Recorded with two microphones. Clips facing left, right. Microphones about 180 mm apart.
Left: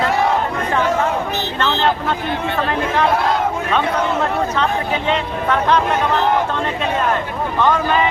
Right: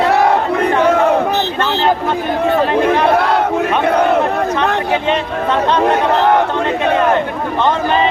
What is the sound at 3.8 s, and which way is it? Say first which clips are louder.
Speech: right 7 dB; 60° right (ahead or behind).